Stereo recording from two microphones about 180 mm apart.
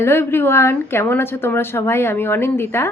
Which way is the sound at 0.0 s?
15° left (ahead or behind).